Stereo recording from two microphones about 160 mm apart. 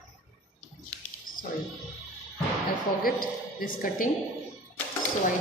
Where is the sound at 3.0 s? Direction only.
60° left (ahead or behind).